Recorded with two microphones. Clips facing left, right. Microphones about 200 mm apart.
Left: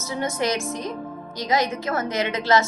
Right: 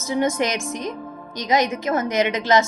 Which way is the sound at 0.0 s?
15° right (ahead or behind).